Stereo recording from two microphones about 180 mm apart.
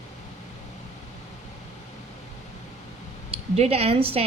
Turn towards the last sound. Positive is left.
turn(degrees=-30)  # may be behind; listen again after turning